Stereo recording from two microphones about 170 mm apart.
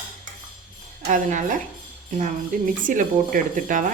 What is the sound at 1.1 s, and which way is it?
Speech, 45° right (ahead or behind).